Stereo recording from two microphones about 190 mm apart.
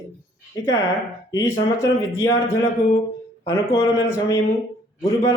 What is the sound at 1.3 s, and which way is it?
Speech, 15° left (ahead or behind).